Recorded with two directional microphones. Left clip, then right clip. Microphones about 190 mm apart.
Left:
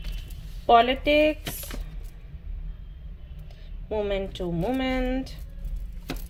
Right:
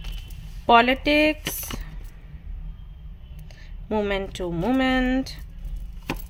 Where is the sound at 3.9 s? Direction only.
30° right (ahead or behind).